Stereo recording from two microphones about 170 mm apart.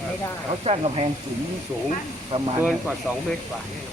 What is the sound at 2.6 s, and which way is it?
Speech, 5° right (ahead or behind).